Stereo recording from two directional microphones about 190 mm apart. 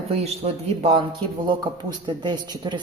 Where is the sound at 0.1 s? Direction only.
30° right (ahead or behind).